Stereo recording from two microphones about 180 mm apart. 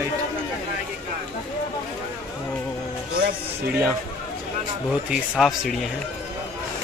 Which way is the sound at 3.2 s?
55° right (ahead or behind).